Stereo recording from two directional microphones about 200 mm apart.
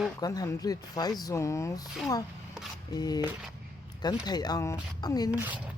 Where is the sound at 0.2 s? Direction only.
20° left (ahead or behind).